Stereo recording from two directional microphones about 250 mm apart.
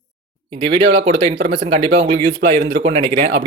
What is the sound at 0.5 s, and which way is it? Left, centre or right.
Speech, right.